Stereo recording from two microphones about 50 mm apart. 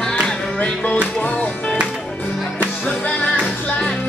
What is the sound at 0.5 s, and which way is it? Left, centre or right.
Music, left.